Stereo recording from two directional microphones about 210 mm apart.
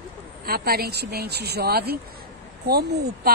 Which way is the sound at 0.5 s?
45° right (ahead or behind).